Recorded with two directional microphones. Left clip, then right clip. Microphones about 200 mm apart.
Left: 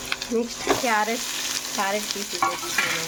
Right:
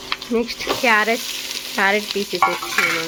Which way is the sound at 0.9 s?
30° right (ahead or behind).